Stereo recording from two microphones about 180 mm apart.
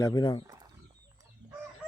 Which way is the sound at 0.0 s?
25° left (ahead or behind).